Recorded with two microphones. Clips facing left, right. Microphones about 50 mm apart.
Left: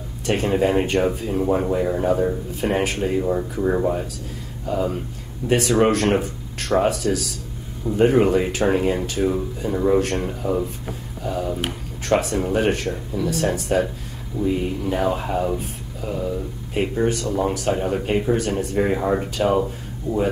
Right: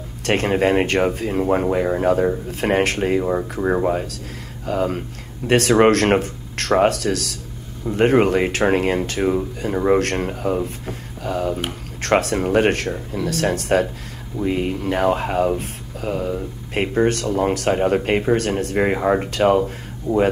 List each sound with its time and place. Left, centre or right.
0.2 s speech: right
2.6 s speech: right
4.6 s speech: right
19.3 s speech: right
20.1 s speech: left